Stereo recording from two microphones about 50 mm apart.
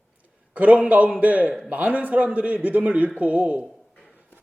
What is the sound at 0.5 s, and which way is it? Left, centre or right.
A man's voice, right.